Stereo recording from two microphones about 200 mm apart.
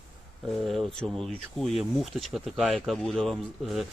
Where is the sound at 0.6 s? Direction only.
Centre (ahead or behind).